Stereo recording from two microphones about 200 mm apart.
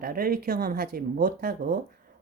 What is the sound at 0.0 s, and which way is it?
Speech, 50° right (ahead or behind).